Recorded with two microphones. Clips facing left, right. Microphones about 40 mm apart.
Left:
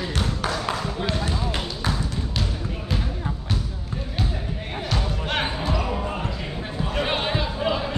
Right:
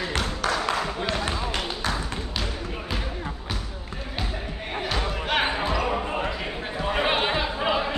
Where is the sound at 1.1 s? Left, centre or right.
Right.